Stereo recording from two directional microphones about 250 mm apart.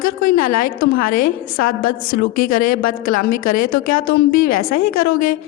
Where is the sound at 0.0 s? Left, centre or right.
Left.